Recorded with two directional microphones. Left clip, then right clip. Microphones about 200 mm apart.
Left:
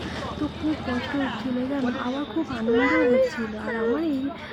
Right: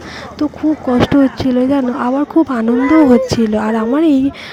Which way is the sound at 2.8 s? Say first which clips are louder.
Right 9 dB; 10° right (ahead or behind).